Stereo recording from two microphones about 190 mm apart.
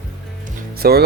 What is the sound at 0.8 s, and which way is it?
Speech, 55° right (ahead or behind).